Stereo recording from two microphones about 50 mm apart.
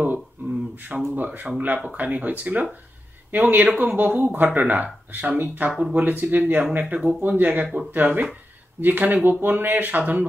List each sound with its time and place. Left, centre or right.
0.4 s a sound: right
0.7 s speech: right
5.7 s speech: centre
5.9 s speech: right